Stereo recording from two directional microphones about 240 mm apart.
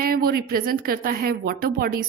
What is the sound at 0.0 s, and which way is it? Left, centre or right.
Speech, right.